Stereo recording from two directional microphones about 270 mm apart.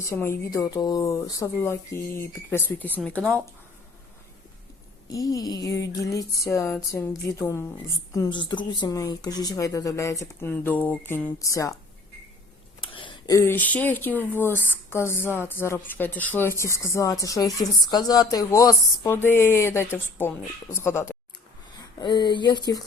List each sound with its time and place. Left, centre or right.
0.0 s speech: centre
5.0 s speech: centre
12.9 s speech: centre